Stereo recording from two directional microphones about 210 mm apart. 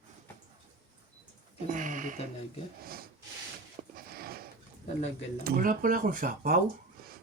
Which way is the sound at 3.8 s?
35° right (ahead or behind).